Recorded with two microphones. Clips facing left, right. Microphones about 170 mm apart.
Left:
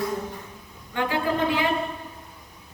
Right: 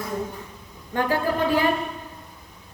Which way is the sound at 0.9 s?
40° right (ahead or behind).